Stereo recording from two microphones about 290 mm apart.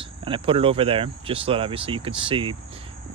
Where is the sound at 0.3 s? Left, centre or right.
Centre.